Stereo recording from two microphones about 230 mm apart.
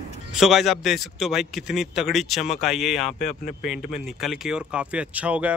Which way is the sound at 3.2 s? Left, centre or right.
Left.